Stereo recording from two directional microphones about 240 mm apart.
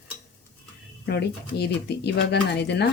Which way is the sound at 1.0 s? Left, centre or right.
Left.